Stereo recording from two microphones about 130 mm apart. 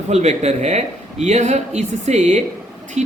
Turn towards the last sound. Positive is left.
turn(degrees=-60)  # may be behind; listen again after turning